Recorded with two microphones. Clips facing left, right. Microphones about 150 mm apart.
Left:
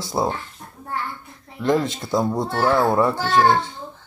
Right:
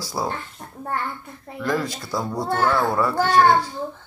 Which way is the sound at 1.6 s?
20° left (ahead or behind).